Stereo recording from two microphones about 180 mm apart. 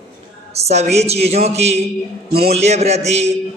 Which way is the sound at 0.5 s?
35° right (ahead or behind).